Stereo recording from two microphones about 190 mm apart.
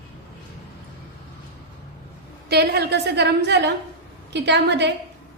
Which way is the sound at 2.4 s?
60° right (ahead or behind).